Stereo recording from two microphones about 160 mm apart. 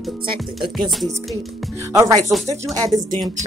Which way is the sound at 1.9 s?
25° right (ahead or behind).